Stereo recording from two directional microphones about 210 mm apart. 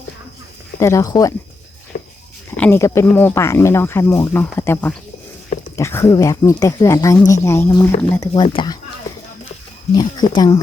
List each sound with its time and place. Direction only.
0.8 s speech: 15° left (ahead or behind)
1.9 s a sound: 40° left (ahead or behind)
2.6 s speech: 10° left (ahead or behind)
8.3 s speech: 25° left (ahead or behind)
9.9 s speech: 20° left (ahead or behind)